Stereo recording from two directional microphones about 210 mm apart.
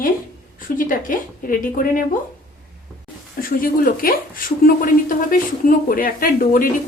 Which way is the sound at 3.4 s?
45° left (ahead or behind).